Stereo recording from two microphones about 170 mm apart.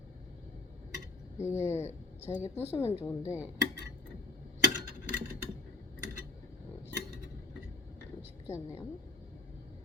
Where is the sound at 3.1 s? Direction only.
15° left (ahead or behind).